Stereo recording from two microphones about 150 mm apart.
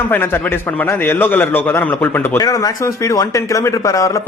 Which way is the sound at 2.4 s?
25° left (ahead or behind).